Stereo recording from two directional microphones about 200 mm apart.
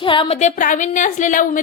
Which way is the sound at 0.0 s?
25° left (ahead or behind).